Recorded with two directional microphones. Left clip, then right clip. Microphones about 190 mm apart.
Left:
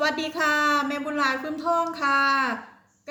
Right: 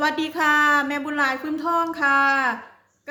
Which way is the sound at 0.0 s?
40° right (ahead or behind).